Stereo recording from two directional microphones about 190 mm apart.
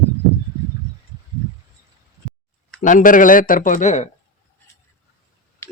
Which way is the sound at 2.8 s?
40° left (ahead or behind).